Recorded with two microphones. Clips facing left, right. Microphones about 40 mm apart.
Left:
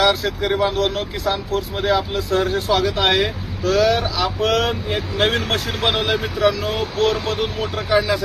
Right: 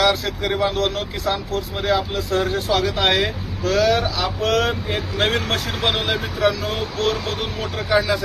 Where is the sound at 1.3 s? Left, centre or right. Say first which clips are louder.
Left 2 dB; centre.